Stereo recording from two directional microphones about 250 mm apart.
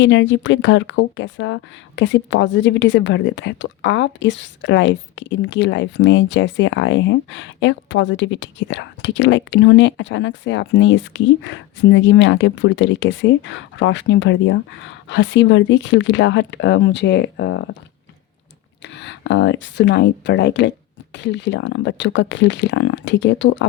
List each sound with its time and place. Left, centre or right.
0.0 s speech: left
18.8 s speech: left